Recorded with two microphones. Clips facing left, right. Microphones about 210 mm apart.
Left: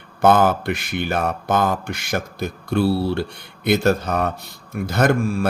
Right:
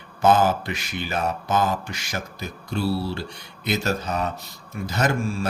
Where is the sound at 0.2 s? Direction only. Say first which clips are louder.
Left 3 dB; 55° left (ahead or behind).